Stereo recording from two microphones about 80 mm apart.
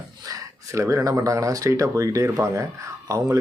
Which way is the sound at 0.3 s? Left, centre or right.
Right.